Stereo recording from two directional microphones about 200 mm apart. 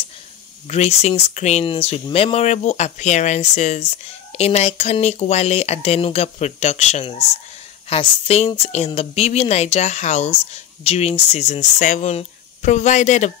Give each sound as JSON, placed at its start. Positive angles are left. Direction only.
{"t": 0.7, "sound": "speech", "side_deg": 30}